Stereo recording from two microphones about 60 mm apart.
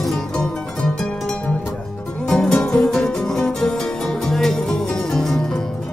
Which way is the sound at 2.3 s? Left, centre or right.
Centre.